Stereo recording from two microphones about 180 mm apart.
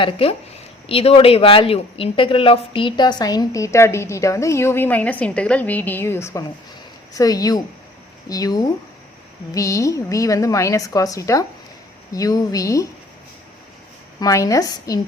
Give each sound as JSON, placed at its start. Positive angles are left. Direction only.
{"t": 0.0, "sound": "a woman's voice", "side_deg": 30}
{"t": 14.2, "sound": "a woman's voice", "side_deg": 20}